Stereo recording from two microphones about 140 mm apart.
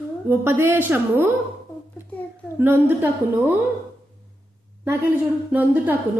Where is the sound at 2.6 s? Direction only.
15° right (ahead or behind).